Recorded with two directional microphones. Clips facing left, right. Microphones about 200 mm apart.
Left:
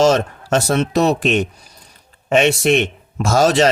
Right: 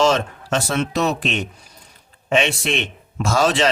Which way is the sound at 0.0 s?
45° left (ahead or behind).